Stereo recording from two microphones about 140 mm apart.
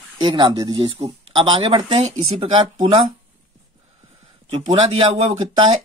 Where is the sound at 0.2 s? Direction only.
35° right (ahead or behind).